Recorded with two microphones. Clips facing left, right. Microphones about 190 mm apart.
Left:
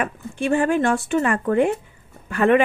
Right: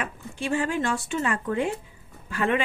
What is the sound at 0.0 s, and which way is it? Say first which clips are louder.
Speech: left 7 dB; 55° left (ahead or behind).